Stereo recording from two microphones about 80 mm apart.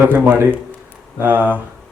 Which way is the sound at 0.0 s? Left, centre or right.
Right.